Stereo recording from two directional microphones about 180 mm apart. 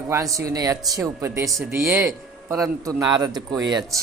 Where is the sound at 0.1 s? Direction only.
20° right (ahead or behind).